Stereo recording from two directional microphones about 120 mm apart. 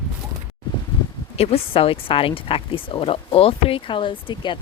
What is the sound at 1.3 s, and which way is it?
A woman's voice, 55° left (ahead or behind).